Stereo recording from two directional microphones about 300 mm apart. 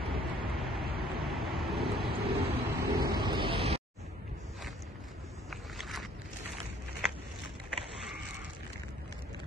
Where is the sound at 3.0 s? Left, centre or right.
Centre.